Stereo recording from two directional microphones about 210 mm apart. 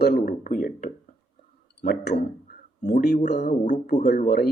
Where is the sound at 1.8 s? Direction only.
50° left (ahead or behind).